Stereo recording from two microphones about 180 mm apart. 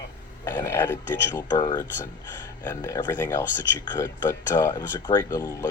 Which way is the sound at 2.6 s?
15° left (ahead or behind).